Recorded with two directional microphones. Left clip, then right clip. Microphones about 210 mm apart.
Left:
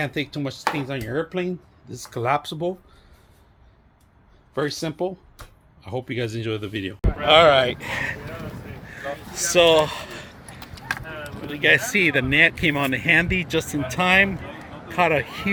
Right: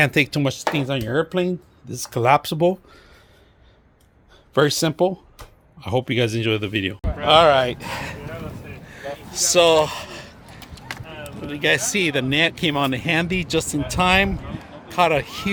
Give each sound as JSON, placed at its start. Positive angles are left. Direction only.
{"t": 0.0, "sound": "speech", "side_deg": -45}
{"t": 4.5, "sound": "speech", "side_deg": -45}
{"t": 5.8, "sound": "speech", "side_deg": -35}
{"t": 7.3, "sound": "speech", "side_deg": -15}
{"t": 8.9, "sound": "a sound", "side_deg": -25}
{"t": 11.2, "sound": "speech", "side_deg": -20}